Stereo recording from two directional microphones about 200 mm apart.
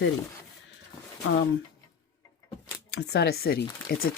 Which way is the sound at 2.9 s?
55° left (ahead or behind).